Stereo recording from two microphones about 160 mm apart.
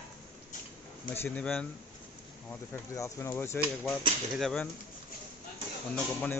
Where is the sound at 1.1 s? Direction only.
10° left (ahead or behind).